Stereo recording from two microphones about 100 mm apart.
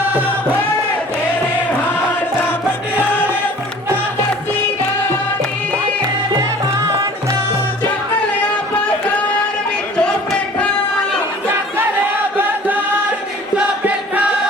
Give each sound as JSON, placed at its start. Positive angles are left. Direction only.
{"t": 0.1, "sound": "music", "side_deg": -15}
{"t": 10.0, "sound": "a sound", "side_deg": 10}
{"t": 11.8, "sound": "chant", "side_deg": -20}